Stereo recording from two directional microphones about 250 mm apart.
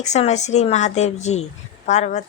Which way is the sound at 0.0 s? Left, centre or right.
Left.